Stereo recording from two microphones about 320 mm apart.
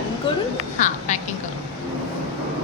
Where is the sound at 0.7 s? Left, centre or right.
Left.